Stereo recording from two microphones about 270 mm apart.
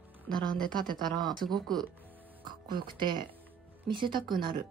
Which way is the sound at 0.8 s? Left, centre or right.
Centre.